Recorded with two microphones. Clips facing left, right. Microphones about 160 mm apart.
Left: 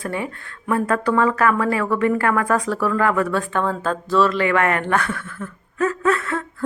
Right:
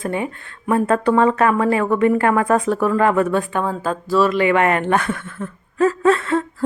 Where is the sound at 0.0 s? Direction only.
20° right (ahead or behind).